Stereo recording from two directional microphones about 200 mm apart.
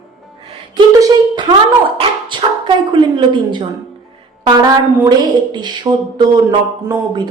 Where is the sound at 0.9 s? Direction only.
20° right (ahead or behind).